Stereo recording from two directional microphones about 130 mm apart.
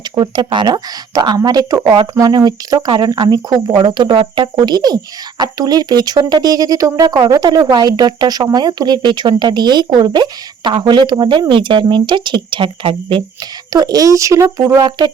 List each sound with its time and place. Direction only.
0.2 s speech: 35° right (ahead or behind)
13.7 s speech: 30° right (ahead or behind)
14.8 s speech: 35° right (ahead or behind)